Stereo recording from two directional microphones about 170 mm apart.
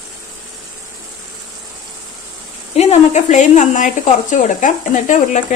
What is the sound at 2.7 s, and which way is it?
Speech, 45° left (ahead or behind).